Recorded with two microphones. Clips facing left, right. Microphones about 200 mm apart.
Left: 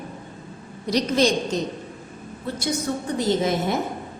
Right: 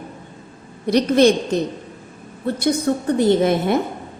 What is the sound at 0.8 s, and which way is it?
Speech, 60° right (ahead or behind).